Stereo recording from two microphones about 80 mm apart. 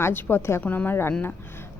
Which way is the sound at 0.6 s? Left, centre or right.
Left.